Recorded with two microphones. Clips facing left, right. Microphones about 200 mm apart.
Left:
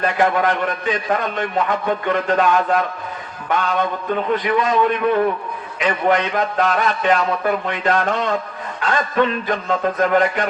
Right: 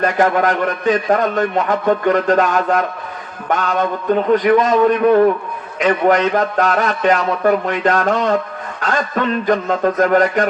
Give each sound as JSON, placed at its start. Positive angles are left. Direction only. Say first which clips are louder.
{"t": 0.0, "sound": "a man's voice", "louder": "right 3 dB", "side_deg": -45}
{"t": 9.5, "sound": "a man's voice", "louder": "right 5 dB", "side_deg": -45}